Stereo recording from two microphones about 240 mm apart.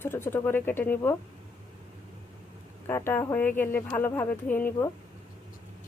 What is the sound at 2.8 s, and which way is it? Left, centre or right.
Speech, centre.